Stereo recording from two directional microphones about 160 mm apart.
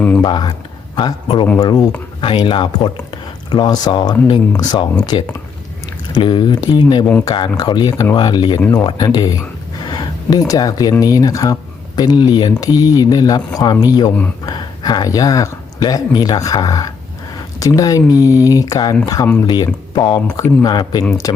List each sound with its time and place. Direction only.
0.2 s speech: 25° left (ahead or behind)
9.8 s a sound: 25° left (ahead or behind)
11.0 s speech: 20° left (ahead or behind)